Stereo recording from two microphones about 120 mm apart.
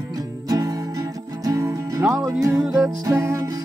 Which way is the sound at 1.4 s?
25° right (ahead or behind).